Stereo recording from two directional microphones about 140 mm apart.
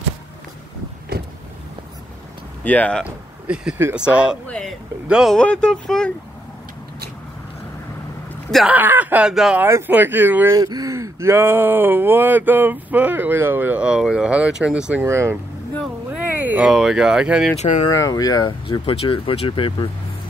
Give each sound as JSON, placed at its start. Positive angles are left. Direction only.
{"t": 2.6, "sound": "speech", "side_deg": 10}
{"t": 3.0, "sound": "speech", "side_deg": -5}
{"t": 4.5, "sound": "speech", "side_deg": 5}
{"t": 8.6, "sound": "speech", "side_deg": -10}
{"t": 9.6, "sound": "speech", "side_deg": -15}
{"t": 10.5, "sound": "speech", "side_deg": -25}
{"t": 15.0, "sound": "speech", "side_deg": -20}
{"t": 17.6, "sound": "speech", "side_deg": 55}
{"t": 17.8, "sound": "speech", "side_deg": 25}